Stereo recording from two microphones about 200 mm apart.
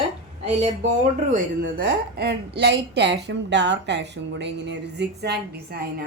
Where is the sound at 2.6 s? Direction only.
60° right (ahead or behind).